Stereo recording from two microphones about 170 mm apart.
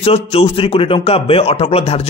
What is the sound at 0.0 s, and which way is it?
A man's voice, 35° left (ahead or behind).